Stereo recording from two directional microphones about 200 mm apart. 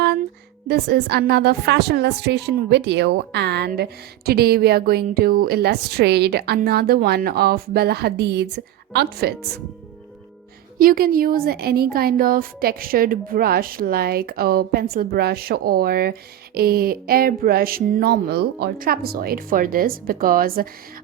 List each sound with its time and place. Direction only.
0.7 s a woman's voice: 55° right (ahead or behind)
10.8 s a woman's voice: 45° right (ahead or behind)